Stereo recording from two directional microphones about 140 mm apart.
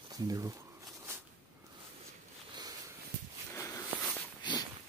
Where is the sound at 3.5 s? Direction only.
20° left (ahead or behind).